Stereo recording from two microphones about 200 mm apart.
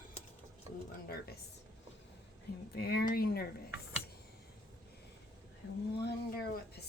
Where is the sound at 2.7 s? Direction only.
50° left (ahead or behind).